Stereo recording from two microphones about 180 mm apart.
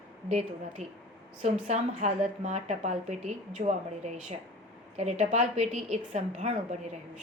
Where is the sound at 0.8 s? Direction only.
40° right (ahead or behind).